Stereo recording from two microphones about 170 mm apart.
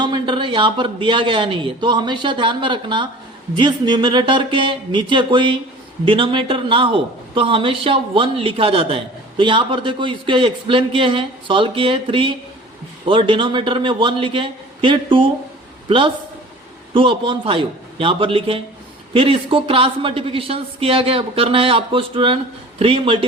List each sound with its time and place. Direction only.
0.0 s a woman's voice: 25° right (ahead or behind)